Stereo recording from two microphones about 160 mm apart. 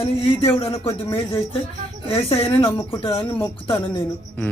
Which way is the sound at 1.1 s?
15° left (ahead or behind).